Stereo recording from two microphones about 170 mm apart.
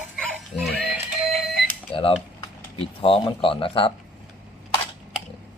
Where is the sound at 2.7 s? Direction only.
30° left (ahead or behind).